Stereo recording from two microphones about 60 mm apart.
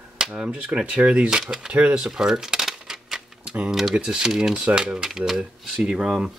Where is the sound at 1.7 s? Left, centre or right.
Right.